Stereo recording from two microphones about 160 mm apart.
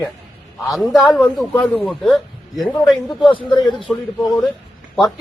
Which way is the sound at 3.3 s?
30° left (ahead or behind).